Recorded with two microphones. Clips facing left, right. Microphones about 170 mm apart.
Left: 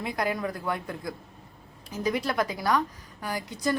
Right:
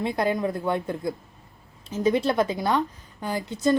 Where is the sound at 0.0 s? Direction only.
25° right (ahead or behind).